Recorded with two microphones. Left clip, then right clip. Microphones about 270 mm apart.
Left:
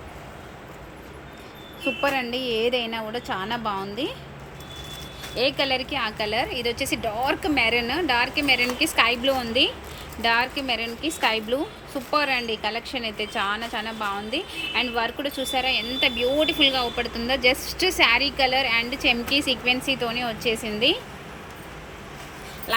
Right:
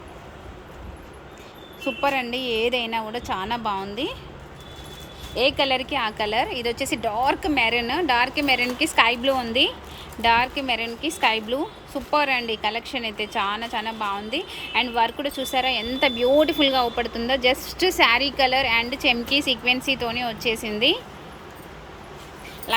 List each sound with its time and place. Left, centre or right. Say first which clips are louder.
2.0 s a woman's voice: right 2 dB; centre
5.3 s a woman's voice: right 2 dB; centre